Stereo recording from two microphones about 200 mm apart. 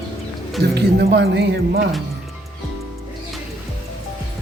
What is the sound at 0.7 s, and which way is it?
Speech, 55° right (ahead or behind).